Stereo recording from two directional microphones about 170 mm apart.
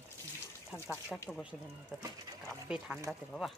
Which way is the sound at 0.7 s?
10° right (ahead or behind).